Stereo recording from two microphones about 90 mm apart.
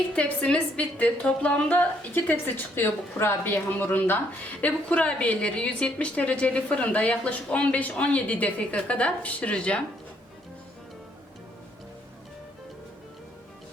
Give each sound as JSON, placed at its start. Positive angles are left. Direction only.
{"t": 0.2, "sound": "a woman's voice", "side_deg": 15}